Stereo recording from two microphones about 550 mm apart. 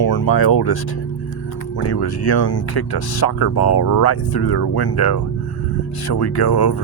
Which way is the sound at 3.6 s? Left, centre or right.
Left.